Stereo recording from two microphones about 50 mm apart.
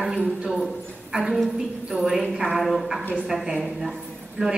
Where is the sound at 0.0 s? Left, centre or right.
Centre.